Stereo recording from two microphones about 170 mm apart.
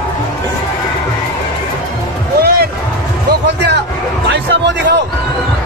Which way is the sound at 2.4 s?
65° right (ahead or behind).